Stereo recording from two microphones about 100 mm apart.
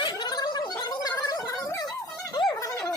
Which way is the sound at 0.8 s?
40° left (ahead or behind).